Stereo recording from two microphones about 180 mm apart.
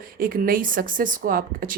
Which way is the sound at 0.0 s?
50° right (ahead or behind).